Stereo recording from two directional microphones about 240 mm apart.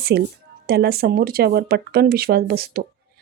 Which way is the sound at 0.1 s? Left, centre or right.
Right.